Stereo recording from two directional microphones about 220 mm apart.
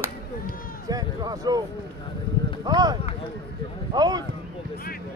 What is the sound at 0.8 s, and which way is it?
Run, 15° right (ahead or behind).